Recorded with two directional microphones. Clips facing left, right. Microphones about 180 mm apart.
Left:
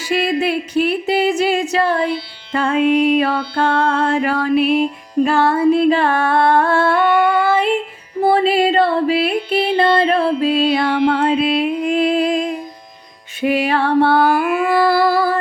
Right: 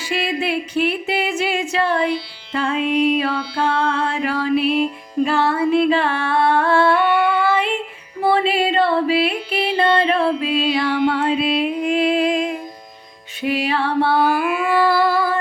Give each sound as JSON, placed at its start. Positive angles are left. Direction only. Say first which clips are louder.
{"t": 0.0, "sound": "a sound", "louder": "left 5 dB", "side_deg": 40}
{"t": 2.5, "sound": "music", "louder": "left 5 dB", "side_deg": 50}
{"t": 5.2, "sound": "singing", "louder": "left 4 dB", "side_deg": 45}
{"t": 8.2, "sound": "music", "louder": "left 4 dB", "side_deg": 40}
{"t": 13.4, "sound": "music", "louder": "left 4 dB", "side_deg": 50}